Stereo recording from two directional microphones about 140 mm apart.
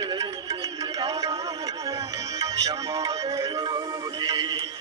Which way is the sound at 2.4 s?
25° right (ahead or behind).